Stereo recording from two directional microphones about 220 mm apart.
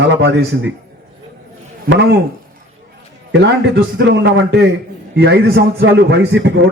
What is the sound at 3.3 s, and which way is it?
A man's voice, 55° right (ahead or behind).